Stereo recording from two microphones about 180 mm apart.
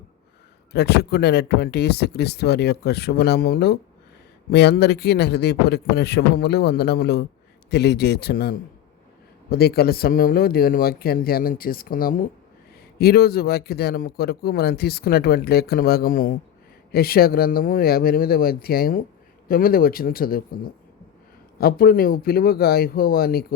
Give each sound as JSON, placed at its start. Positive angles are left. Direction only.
{"t": 0.7, "sound": "a man's voice", "side_deg": 65}
{"t": 21.6, "sound": "a man's voice", "side_deg": 55}